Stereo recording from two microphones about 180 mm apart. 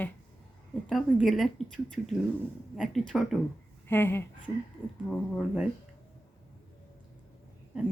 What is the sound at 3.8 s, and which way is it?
Speech, 10° left (ahead or behind).